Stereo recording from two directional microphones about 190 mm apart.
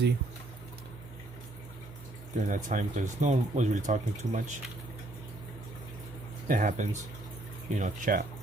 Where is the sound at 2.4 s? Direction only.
40° right (ahead or behind).